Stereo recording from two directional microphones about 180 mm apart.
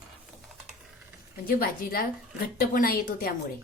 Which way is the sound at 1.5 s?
55° left (ahead or behind).